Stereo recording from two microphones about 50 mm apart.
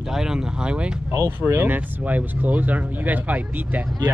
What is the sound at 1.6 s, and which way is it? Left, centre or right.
Speech, right.